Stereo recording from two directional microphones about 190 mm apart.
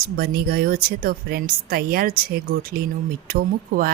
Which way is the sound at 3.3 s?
50° right (ahead or behind).